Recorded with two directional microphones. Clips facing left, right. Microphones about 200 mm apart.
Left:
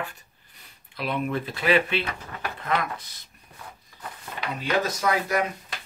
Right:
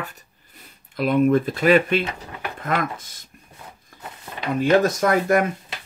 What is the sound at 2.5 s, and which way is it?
Speech, 45° right (ahead or behind).